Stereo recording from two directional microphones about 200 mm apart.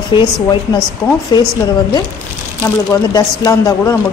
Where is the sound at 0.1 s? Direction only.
25° left (ahead or behind).